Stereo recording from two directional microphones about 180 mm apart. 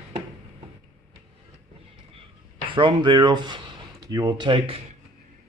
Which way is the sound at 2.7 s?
25° right (ahead or behind).